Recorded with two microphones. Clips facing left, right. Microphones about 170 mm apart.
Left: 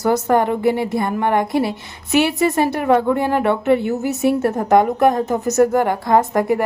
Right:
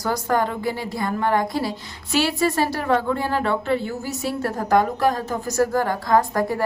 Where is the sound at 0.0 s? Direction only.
25° left (ahead or behind).